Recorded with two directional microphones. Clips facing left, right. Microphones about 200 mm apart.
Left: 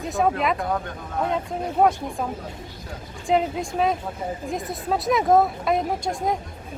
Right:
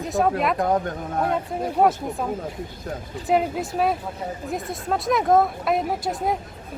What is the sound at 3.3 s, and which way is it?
A woman's voice, 5° right (ahead or behind).